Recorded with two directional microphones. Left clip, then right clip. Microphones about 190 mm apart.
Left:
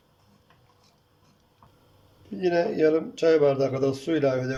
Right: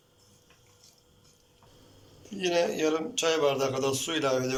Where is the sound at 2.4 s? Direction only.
30° left (ahead or behind).